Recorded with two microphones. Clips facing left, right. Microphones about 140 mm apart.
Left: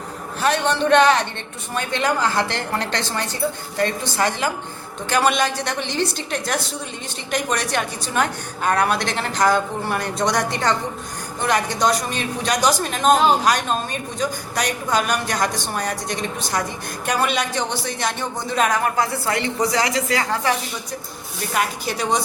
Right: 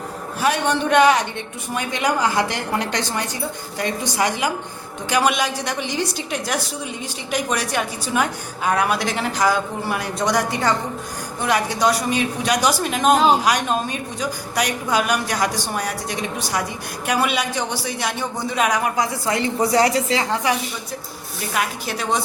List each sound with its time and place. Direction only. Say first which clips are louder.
0.4 s a woman's voice: left 1 dB; 10° right (ahead or behind)
19.4 s speech: right 5 dB; 30° right (ahead or behind)
21.5 s speech: left 1 dB; centre (ahead or behind)